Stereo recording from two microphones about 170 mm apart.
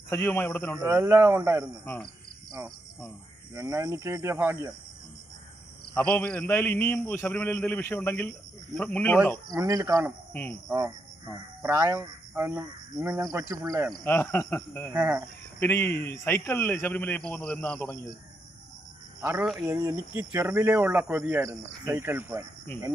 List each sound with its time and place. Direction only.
0.1 s speech: 15° left (ahead or behind)
0.8 s speech: 20° right (ahead or behind)
1.8 s speech: 10° left (ahead or behind)
3.5 s speech: 20° right (ahead or behind)
6.0 s speech: 10° left (ahead or behind)
9.5 s speech: 20° right (ahead or behind)
10.3 s speech: 10° left (ahead or behind)
11.6 s speech: 20° right (ahead or behind)
14.0 s speech: 15° left (ahead or behind)
14.9 s speech: 10° right (ahead or behind)
15.6 s speech: 15° left (ahead or behind)
19.2 s speech: 10° right (ahead or behind)